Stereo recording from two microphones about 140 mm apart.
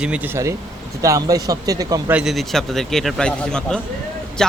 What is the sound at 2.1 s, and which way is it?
Speech, centre (ahead or behind).